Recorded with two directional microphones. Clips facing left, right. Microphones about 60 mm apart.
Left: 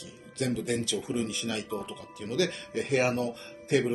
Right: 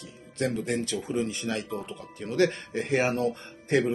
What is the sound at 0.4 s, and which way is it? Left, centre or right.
Speech, right.